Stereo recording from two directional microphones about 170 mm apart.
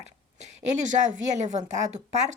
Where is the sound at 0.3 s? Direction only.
45° right (ahead or behind).